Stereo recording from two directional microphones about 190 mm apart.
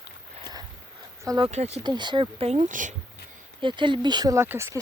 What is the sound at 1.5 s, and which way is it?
Speech, 35° right (ahead or behind).